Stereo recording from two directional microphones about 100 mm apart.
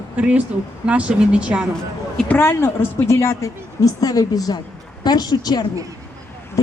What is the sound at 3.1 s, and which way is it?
A woman's voice, 30° left (ahead or behind).